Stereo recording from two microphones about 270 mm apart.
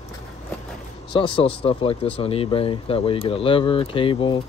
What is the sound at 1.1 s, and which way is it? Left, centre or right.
Speech, centre.